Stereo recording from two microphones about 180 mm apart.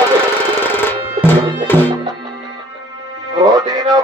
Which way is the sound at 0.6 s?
10° left (ahead or behind).